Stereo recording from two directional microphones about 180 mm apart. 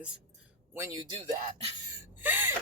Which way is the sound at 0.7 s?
15° right (ahead or behind).